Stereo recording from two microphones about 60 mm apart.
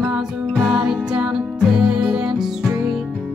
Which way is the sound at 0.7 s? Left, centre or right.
Centre.